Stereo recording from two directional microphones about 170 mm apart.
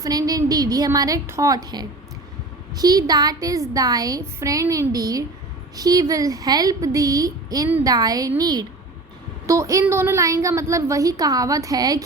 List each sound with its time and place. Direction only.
0.0 s a woman's voice: 20° right (ahead or behind)